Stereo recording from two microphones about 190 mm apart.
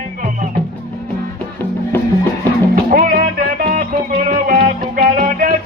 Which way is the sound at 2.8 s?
50° right (ahead or behind).